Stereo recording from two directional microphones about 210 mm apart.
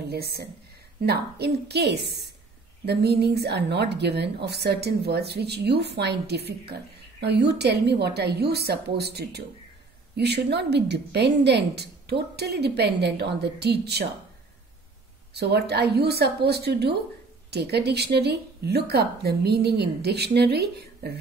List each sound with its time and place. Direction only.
0.1 s a woman's voice: 50° right (ahead or behind)
15.3 s a woman's voice: 50° right (ahead or behind)